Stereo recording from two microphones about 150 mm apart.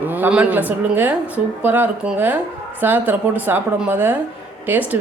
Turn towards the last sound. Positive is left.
turn(degrees=-15)  # may be behind; listen again after turning